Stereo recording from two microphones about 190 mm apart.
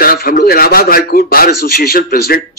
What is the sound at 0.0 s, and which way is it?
A man's voice, 50° left (ahead or behind).